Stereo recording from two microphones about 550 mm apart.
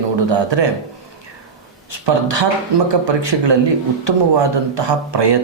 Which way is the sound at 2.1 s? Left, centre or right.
Right.